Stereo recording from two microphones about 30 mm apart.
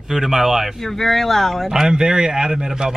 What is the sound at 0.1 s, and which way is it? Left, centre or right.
Speech, centre.